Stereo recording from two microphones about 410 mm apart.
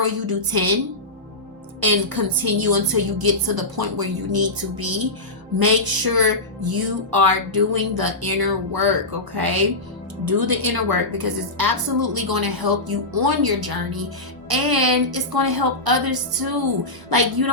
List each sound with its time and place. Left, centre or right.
0.0 s a woman's voice: right
1.8 s a woman's voice: right